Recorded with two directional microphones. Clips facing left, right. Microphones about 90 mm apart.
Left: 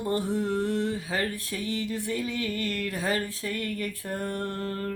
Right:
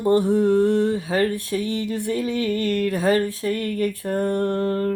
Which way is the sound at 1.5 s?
50° right (ahead or behind).